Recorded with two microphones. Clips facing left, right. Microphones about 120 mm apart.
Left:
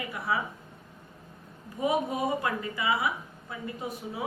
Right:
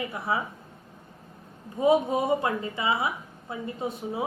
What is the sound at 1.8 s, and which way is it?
A woman's voice, 25° right (ahead or behind).